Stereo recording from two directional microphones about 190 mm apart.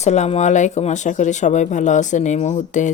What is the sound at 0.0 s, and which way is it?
Speech, 35° left (ahead or behind).